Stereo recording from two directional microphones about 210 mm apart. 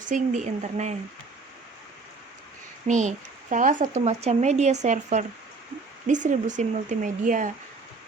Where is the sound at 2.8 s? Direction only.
35° right (ahead or behind).